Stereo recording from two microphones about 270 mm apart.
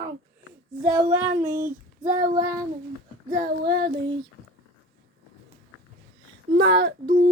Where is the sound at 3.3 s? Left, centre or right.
Right.